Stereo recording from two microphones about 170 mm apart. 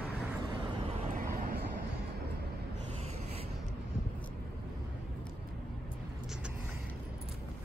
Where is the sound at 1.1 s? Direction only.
55° right (ahead or behind).